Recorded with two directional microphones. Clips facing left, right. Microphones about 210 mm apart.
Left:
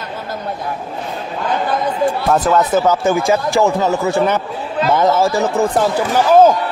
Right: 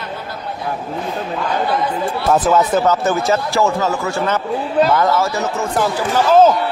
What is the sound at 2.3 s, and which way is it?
Speech, 5° right (ahead or behind).